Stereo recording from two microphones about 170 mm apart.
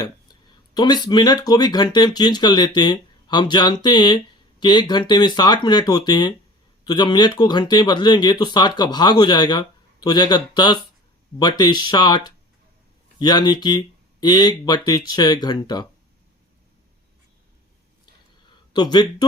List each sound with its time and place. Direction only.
0.0 s speech: 25° left (ahead or behind)
18.7 s speech: 25° left (ahead or behind)